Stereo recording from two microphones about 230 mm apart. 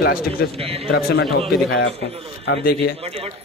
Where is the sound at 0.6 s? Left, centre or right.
Right.